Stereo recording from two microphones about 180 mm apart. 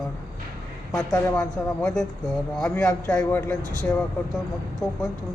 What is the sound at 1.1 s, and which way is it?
Speech, 15° left (ahead or behind).